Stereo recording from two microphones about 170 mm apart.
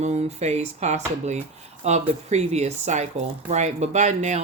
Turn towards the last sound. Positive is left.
turn(degrees=-40)  # may be behind; listen again after turning